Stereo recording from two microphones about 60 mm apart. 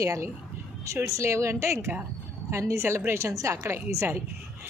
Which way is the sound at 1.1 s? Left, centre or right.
Right.